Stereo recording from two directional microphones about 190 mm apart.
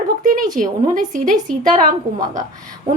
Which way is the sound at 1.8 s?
20° right (ahead or behind).